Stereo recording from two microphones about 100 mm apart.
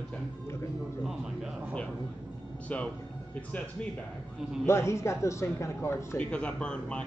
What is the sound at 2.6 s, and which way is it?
Speech, 15° left (ahead or behind).